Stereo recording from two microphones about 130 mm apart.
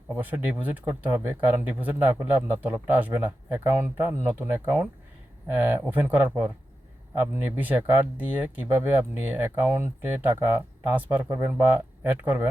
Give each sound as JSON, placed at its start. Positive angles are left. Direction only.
{"t": 0.2, "sound": "speech", "side_deg": -15}